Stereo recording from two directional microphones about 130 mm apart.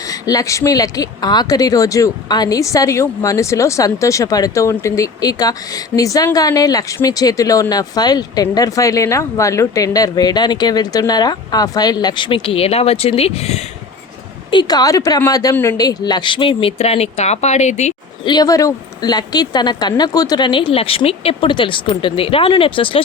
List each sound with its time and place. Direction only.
0.0 s speech: 25° left (ahead or behind); by 13.7 s 55° left (ahead or behind)
14.5 s a woman's voice: 35° left (ahead or behind); by 17.9 s 60° left (ahead or behind)
18.3 s a woman's voice: 30° left (ahead or behind)